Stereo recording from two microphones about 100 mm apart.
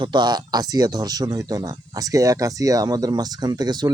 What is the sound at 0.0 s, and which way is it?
Speech, 45° right (ahead or behind).